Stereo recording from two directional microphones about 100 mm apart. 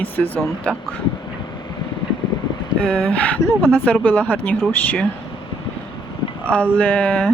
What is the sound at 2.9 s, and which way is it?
Speech, 15° left (ahead or behind).